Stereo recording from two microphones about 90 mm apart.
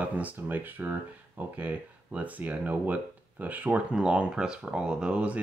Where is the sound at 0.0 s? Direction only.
15° right (ahead or behind).